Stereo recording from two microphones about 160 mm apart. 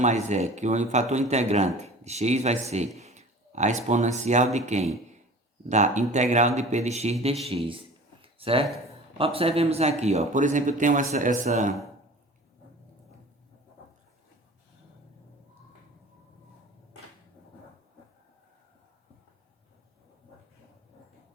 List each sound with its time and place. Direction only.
0.0 s speech: 45° right (ahead or behind)
7.4 s a sound: 35° right (ahead or behind)
9.1 s speech: 35° right (ahead or behind)